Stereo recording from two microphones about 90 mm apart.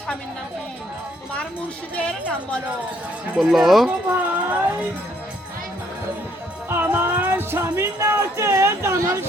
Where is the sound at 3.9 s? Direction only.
25° right (ahead or behind).